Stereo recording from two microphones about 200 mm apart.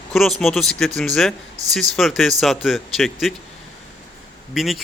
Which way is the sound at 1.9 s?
Centre (ahead or behind).